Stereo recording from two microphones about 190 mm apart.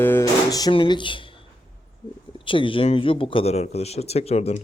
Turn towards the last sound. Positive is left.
turn(degrees=35)  # may be behind; listen again after turning